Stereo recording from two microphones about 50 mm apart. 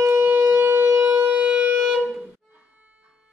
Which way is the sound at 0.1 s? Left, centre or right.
Right.